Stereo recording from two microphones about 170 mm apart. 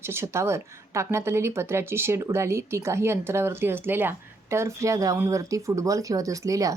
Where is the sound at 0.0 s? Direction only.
15° right (ahead or behind).